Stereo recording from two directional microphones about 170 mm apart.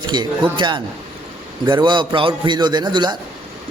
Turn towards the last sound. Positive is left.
turn(degrees=-25)  # may be behind; listen again after turning